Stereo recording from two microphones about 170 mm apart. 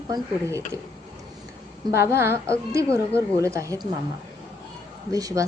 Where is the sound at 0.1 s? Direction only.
15° right (ahead or behind).